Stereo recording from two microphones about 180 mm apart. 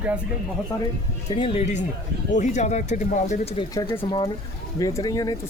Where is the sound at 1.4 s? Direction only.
35° left (ahead or behind).